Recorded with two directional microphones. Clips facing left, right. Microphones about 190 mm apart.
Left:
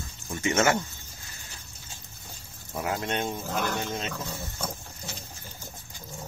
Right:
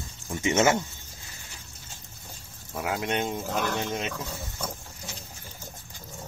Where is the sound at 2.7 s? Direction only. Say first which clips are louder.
Even; 5° right (ahead or behind).